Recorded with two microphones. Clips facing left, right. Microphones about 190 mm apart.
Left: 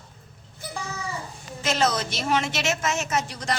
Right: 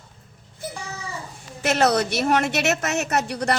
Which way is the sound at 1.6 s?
65° right (ahead or behind).